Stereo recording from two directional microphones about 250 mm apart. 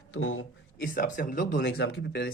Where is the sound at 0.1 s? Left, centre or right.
Left.